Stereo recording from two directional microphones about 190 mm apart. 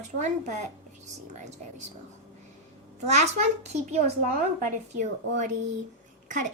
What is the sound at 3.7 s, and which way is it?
Speech, 35° right (ahead or behind).